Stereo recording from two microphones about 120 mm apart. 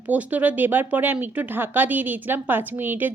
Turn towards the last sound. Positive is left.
turn(degrees=-15)  # may be behind; listen again after turning